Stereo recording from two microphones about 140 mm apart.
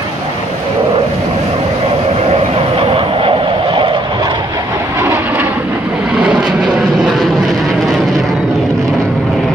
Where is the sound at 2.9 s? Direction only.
40° right (ahead or behind).